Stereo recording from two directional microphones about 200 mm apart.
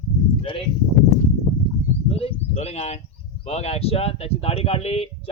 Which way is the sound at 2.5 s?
30° left (ahead or behind).